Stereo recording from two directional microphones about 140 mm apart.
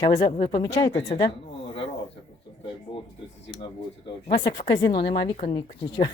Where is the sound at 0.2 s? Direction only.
50° left (ahead or behind).